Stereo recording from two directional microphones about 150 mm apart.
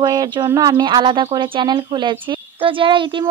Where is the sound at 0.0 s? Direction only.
25° right (ahead or behind).